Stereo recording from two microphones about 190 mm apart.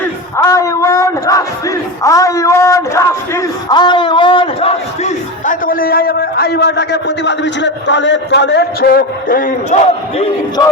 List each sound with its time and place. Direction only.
0.0 s speech: 15° left (ahead or behind); by 9.7 s 45° left (ahead or behind)